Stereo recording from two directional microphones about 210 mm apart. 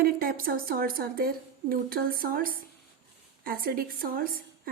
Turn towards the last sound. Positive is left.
turn(degrees=-45)  # may be behind; listen again after turning